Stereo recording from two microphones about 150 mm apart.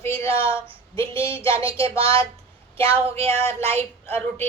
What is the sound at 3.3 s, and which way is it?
Speech, 15° left (ahead or behind).